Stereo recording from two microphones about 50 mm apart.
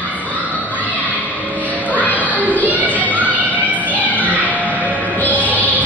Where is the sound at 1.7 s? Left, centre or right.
Right.